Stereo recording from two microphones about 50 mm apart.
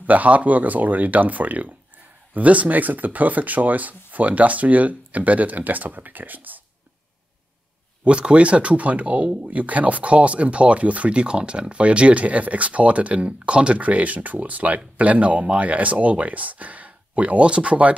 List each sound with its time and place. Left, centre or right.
0.0 s speech: right
8.0 s speech: right